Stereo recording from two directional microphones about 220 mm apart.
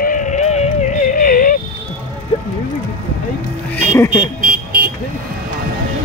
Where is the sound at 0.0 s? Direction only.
35° left (ahead or behind).